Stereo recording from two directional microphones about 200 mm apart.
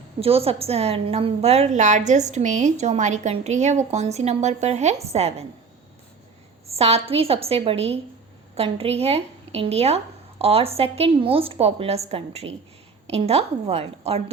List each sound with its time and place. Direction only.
0.2 s a woman's voice: 30° right (ahead or behind)
6.7 s a woman's voice: 30° right (ahead or behind)